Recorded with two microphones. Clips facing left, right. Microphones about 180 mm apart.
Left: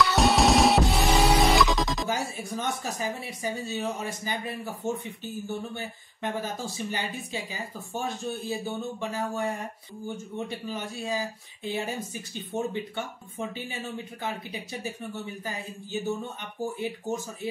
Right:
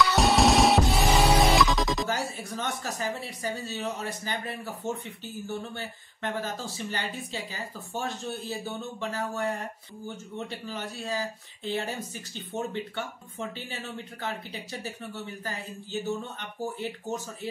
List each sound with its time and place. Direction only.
0.0 s music: centre (ahead or behind)
2.0 s speech: 15° left (ahead or behind)